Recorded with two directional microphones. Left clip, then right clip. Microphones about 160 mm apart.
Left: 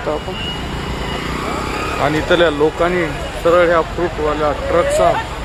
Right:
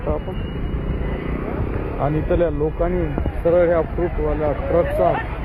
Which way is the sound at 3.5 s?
10° left (ahead or behind).